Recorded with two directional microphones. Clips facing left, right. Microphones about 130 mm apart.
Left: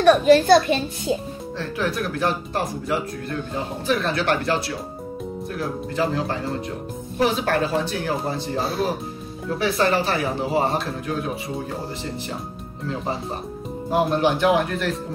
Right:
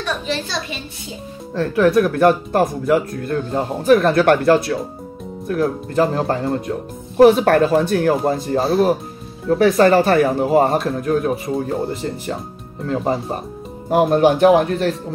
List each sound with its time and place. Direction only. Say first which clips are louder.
0.0 s a child's voice: left 10 dB; 55° left (ahead or behind)
1.5 s speech: right 11 dB; 50° right (ahead or behind)